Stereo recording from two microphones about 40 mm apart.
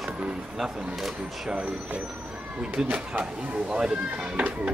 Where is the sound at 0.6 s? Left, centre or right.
Centre.